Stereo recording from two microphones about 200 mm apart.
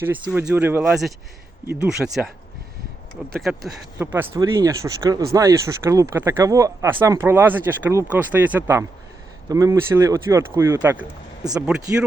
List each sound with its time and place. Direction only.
0.0 s speech: 10° right (ahead or behind)
3.3 s speech: centre (ahead or behind)
3.9 s speech: 10° right (ahead or behind)